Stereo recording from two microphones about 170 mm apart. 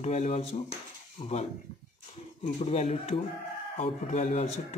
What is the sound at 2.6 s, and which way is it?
Speech, 40° left (ahead or behind).